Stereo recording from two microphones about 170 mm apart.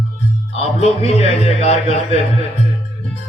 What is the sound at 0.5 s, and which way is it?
Speech, 35° left (ahead or behind).